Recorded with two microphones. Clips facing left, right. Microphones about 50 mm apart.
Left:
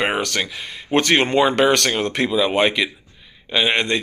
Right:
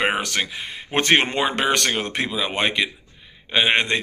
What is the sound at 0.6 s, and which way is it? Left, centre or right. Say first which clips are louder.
Speech: left 3 dB; right.